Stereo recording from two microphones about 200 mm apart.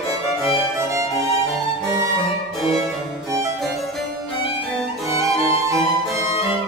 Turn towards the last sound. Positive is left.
turn(degrees=-15)  # may be behind; listen again after turning